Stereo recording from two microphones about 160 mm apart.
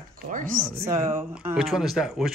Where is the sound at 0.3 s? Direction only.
55° right (ahead or behind).